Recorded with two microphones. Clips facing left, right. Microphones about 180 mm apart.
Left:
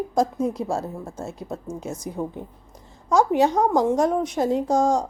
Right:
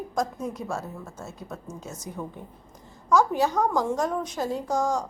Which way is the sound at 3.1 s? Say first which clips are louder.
Left 3 dB; 20° left (ahead or behind).